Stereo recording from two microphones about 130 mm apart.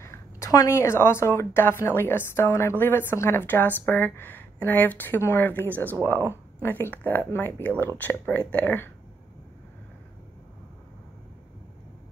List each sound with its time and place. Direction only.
0.0 s a woman's voice: 20° left (ahead or behind)